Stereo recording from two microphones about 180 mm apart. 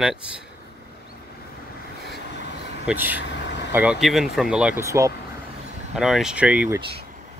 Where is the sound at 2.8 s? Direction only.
10° right (ahead or behind).